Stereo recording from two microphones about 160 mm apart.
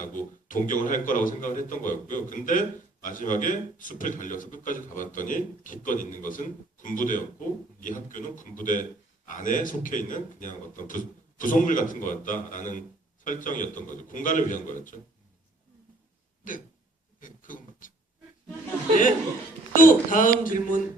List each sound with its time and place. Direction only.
0.0 s a man's voice: 55° left (ahead or behind)
16.4 s throat clearing: 55° left (ahead or behind)
17.2 s speech: 55° left (ahead or behind)
19.7 s a man's voice: 55° left (ahead or behind)